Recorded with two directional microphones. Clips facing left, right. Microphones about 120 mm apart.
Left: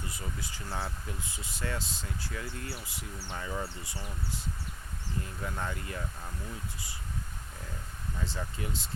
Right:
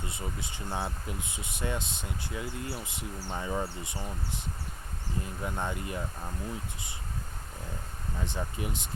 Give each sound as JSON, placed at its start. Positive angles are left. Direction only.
{"t": 0.0, "sound": "speech", "side_deg": -25}
{"t": 8.2, "sound": "speech", "side_deg": -20}